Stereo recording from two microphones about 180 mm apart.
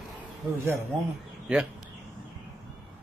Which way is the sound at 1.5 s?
5° right (ahead or behind).